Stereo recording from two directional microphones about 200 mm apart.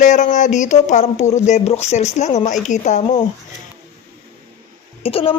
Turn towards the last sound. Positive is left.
turn(degrees=30)  # may be behind; listen again after turning